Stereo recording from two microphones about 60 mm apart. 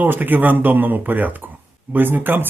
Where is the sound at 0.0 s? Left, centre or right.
Right.